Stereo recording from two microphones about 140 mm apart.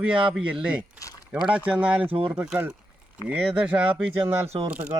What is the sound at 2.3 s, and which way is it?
Speech, 10° right (ahead or behind).